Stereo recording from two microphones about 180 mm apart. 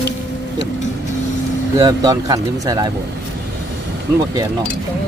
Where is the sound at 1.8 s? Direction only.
20° right (ahead or behind).